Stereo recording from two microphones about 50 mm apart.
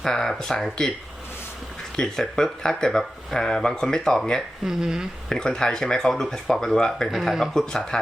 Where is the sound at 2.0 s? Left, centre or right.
Centre.